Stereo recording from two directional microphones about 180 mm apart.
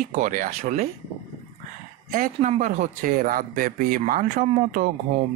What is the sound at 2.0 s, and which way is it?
Speech, 50° right (ahead or behind).